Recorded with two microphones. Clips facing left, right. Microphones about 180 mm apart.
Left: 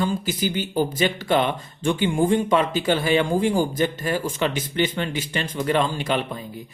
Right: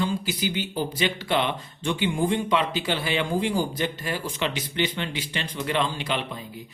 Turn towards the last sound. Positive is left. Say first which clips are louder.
# left 4 dB
turn(degrees=45)  # may be behind; listen again after turning